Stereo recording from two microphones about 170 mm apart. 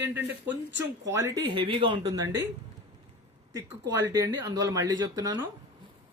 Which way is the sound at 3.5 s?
15° right (ahead or behind).